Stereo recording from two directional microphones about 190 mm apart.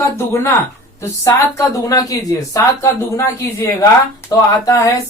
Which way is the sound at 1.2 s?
15° left (ahead or behind).